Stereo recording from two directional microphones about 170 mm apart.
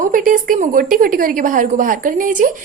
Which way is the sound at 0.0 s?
55° right (ahead or behind).